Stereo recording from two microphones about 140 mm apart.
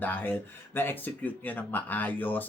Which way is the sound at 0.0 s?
15° left (ahead or behind).